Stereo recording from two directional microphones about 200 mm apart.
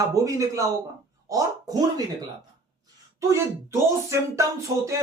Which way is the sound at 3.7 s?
15° right (ahead or behind).